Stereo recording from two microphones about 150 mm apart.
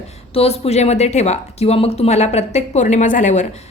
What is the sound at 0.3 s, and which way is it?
A woman's voice, 40° left (ahead or behind).